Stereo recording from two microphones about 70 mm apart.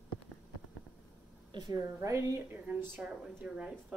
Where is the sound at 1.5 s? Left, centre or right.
Right.